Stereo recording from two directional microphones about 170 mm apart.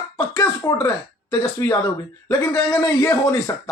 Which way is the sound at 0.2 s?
20° left (ahead or behind).